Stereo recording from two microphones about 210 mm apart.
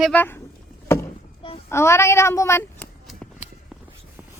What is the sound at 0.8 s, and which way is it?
Vehicle, 10° left (ahead or behind).